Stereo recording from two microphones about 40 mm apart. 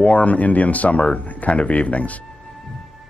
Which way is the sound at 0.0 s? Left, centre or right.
Left.